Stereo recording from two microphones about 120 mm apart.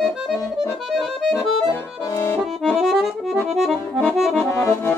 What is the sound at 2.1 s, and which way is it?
Accordion, 20° left (ahead or behind).